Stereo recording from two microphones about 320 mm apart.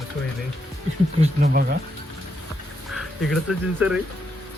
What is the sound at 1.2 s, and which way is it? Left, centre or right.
Speech, right.